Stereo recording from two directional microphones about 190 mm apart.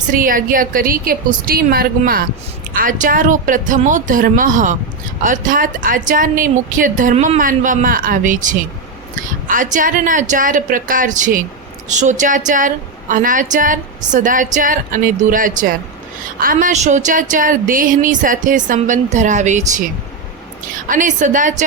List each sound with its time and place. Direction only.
0.1 s a woman's voice: 45° right (ahead or behind)
20.7 s a woman's voice: 45° right (ahead or behind)